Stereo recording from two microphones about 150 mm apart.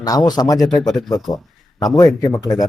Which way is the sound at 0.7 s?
5° left (ahead or behind).